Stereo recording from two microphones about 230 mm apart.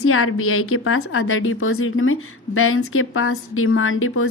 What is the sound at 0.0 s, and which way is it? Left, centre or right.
A woman's voice, left.